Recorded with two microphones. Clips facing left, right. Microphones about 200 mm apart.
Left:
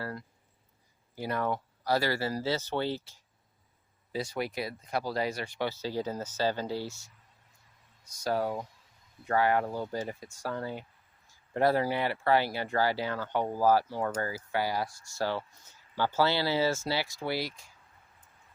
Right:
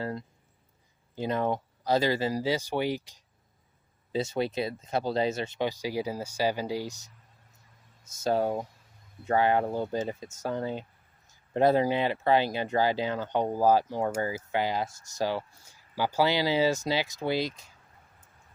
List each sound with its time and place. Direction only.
0.0 s speech: 20° right (ahead or behind)